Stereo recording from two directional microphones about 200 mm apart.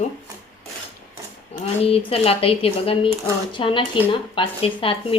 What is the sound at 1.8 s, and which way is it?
Speech, 30° left (ahead or behind).